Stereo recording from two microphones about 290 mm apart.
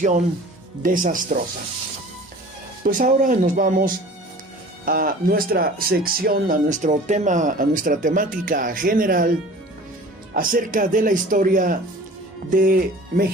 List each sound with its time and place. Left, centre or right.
0.0 s speech: right
2.8 s speech: right
10.3 s speech: right